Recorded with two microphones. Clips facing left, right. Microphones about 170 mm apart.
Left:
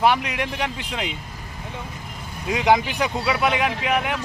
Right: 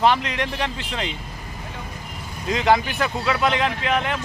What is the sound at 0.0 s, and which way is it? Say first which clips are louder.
Speech: even; 10° left (ahead or behind).